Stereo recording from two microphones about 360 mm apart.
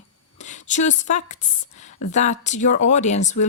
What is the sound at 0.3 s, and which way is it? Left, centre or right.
A woman's voice, centre.